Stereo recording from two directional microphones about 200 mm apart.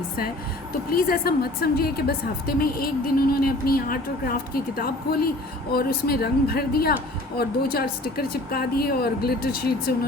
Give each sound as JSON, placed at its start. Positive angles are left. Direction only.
{"t": 0.9, "sound": "a woman's voice", "side_deg": 50}